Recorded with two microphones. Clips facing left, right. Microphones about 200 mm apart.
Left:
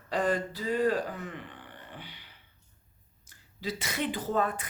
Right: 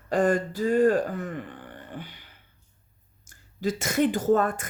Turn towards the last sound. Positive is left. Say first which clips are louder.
# right 7 dB
turn(degrees=-50)  # may be behind; listen again after turning